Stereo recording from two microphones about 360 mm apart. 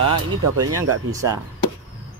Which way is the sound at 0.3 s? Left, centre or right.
Right.